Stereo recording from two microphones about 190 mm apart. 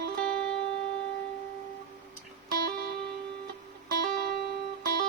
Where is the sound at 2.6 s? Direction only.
60° right (ahead or behind).